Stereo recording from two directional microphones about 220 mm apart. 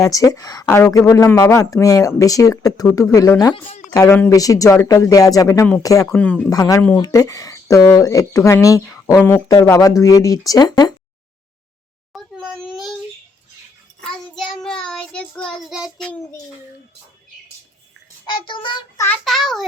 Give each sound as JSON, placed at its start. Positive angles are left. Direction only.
{"t": 0.0, "sound": "speech", "side_deg": 15}
{"t": 12.1, "sound": "a sound", "side_deg": 0}
{"t": 14.0, "sound": "child singing", "side_deg": 0}
{"t": 18.3, "sound": "child singing", "side_deg": 20}
{"t": 19.0, "sound": "a child's voice", "side_deg": 5}